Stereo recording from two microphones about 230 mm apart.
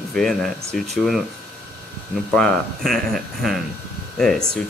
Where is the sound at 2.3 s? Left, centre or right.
Centre.